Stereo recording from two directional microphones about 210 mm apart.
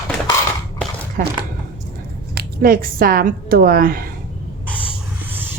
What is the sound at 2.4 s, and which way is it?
A woman's voice, 45° right (ahead or behind).